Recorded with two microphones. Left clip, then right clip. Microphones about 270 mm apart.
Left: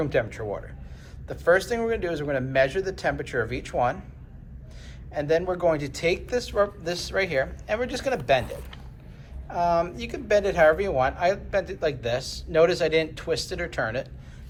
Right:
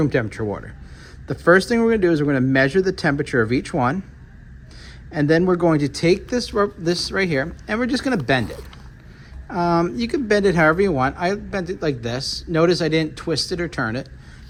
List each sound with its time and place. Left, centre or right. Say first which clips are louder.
0.0 s speech: right 4 dB; right
5.1 s speech: right 6 dB; right